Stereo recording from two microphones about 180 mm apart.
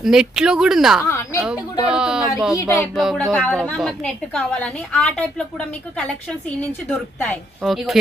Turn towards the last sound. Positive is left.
turn(degrees=0)  # may be behind; listen again after turning